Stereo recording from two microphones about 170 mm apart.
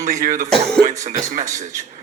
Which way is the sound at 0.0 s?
45° right (ahead or behind).